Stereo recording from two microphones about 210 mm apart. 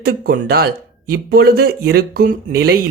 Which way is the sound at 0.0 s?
45° right (ahead or behind).